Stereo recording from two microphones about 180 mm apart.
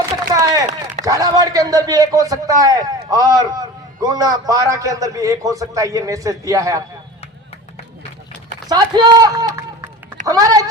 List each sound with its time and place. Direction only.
0.3 s a sound: 20° right (ahead or behind)
1.0 s a man's voice: 20° right (ahead or behind)
8.7 s a man's voice: 20° right (ahead or behind)